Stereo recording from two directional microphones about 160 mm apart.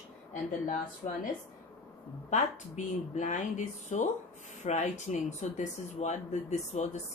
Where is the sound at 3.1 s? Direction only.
50° left (ahead or behind).